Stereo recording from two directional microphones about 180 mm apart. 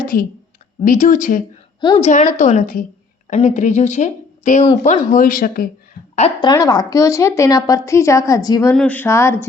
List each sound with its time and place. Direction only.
0.0 s a woman's voice: 50° left (ahead or behind)
1.8 s a woman's voice: 25° left (ahead or behind)
2.0 s a woman's voice: 40° left (ahead or behind)
6.1 s a woman's voice: 35° left (ahead or behind)
6.5 s a woman's voice: 20° left (ahead or behind)
8.7 s a woman's voice: 5° left (ahead or behind)